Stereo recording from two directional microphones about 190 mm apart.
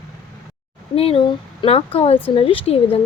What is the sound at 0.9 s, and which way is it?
A woman's voice, 30° left (ahead or behind).